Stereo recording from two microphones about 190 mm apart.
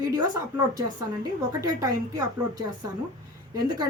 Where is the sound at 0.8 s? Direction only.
20° right (ahead or behind).